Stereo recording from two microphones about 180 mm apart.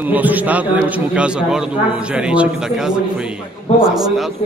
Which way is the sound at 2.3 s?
5° right (ahead or behind).